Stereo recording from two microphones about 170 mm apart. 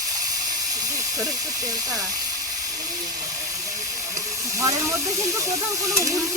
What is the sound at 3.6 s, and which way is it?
Steam, 50° right (ahead or behind).